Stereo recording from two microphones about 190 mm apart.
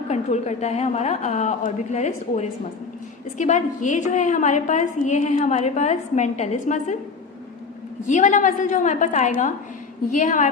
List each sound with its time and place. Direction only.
0.1 s a woman's voice: 35° left (ahead or behind)
8.0 s a woman's voice: 40° left (ahead or behind)